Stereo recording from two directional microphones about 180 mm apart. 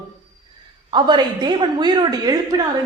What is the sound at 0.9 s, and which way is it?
A woman's voice, 25° right (ahead or behind).